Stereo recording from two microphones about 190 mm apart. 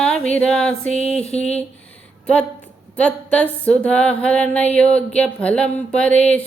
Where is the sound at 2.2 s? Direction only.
5° left (ahead or behind).